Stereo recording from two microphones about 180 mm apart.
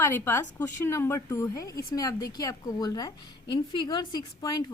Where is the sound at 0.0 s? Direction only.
15° left (ahead or behind).